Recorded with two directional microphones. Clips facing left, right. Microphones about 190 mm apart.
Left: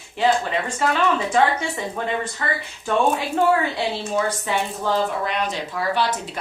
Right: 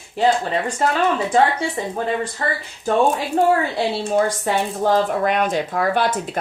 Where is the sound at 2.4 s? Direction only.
35° right (ahead or behind).